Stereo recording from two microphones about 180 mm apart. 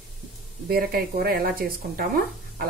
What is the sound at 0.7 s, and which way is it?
Speech, 60° right (ahead or behind).